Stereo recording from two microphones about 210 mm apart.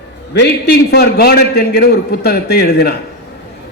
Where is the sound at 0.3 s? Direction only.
50° left (ahead or behind).